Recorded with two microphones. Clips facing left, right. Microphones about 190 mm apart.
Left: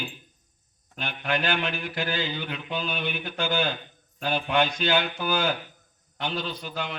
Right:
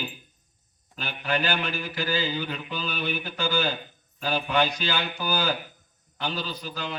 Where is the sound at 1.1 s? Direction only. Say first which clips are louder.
Even; 40° right (ahead or behind).